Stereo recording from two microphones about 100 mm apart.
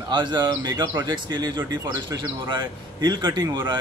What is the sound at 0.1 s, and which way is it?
Speech, 50° right (ahead or behind).